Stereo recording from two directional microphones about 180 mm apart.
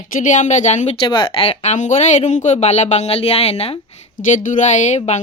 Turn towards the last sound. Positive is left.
turn(degrees=40)  # may be behind; listen again after turning